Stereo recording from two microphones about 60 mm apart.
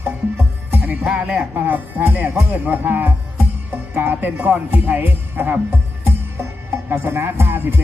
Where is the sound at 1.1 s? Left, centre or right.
Centre; by 5.8 s right.